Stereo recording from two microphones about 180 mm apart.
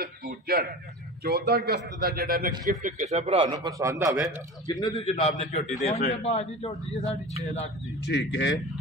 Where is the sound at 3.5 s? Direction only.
20° right (ahead or behind).